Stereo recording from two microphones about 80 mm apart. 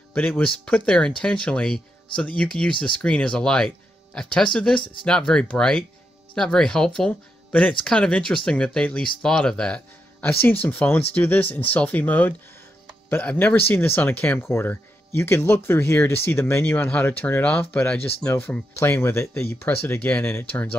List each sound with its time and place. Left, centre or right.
0.1 s speech: centre
10.2 s speech: left